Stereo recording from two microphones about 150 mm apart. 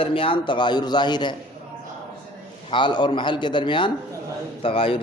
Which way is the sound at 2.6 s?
30° left (ahead or behind).